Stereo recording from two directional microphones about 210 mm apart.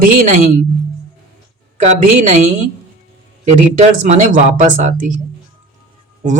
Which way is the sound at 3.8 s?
35° right (ahead or behind).